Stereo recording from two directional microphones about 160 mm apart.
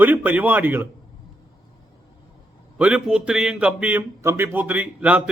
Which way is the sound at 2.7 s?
5° right (ahead or behind).